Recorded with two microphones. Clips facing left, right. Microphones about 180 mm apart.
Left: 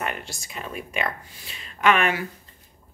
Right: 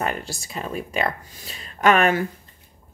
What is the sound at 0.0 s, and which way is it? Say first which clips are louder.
Speech: right 4 dB; 35° right (ahead or behind).